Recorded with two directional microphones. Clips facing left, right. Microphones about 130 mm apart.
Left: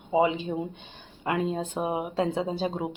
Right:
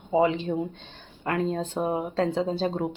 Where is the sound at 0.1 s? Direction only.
15° left (ahead or behind).